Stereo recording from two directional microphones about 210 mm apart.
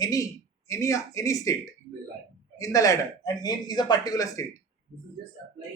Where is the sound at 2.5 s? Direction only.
15° left (ahead or behind).